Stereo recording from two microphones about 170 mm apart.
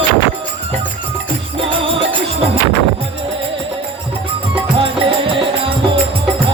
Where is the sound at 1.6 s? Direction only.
35° right (ahead or behind).